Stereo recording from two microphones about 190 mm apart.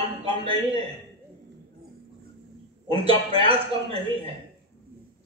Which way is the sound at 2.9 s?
30° right (ahead or behind).